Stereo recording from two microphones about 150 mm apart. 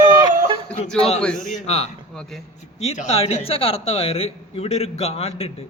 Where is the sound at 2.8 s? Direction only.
45° left (ahead or behind).